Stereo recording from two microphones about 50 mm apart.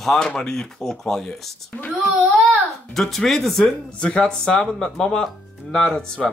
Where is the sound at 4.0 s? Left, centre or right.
Centre.